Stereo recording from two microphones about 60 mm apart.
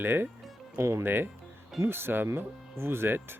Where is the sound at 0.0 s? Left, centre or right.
Right.